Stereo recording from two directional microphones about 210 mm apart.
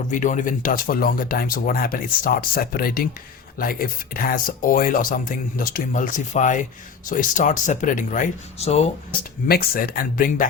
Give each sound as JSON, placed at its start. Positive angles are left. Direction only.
{"t": 0.1, "sound": "speech", "side_deg": 35}
{"t": 9.5, "sound": "speech", "side_deg": 45}